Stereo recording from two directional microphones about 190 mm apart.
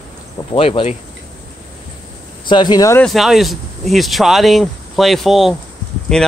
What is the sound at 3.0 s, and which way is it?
Speech, centre (ahead or behind).